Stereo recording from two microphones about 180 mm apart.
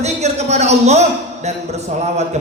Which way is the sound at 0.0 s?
40° right (ahead or behind).